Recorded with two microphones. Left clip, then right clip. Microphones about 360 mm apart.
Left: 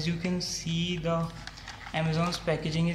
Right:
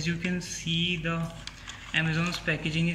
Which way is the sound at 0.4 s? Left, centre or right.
Left.